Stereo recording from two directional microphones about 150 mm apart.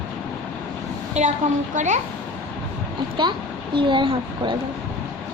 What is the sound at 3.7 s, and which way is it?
Speech, 35° right (ahead or behind).